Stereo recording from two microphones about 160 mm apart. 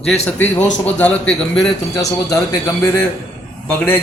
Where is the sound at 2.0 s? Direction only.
20° left (ahead or behind).